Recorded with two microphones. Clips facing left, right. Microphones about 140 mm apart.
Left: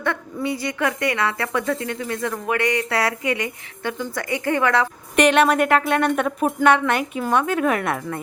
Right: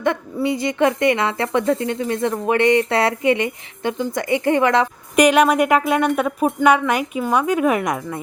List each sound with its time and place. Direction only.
0.0 s a woman's voice: 20° right (ahead or behind)
5.1 s speech: 10° right (ahead or behind)